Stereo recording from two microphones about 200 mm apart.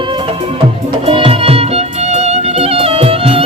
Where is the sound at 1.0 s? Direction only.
25° right (ahead or behind).